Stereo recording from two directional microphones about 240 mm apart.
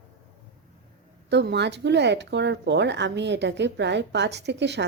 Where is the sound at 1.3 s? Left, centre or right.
Right.